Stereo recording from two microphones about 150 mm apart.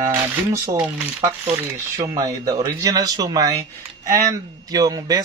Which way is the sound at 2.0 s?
25° right (ahead or behind).